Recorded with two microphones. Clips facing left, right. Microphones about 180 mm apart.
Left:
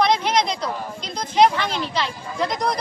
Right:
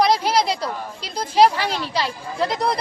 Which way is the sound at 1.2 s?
35° right (ahead or behind).